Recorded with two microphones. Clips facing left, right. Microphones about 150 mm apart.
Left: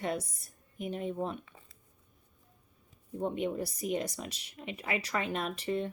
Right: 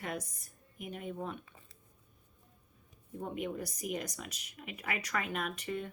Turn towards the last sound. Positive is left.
turn(degrees=30)  # may be behind; listen again after turning